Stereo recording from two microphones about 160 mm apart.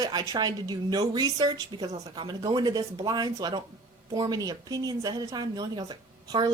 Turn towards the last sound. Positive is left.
turn(degrees=-25)  # may be behind; listen again after turning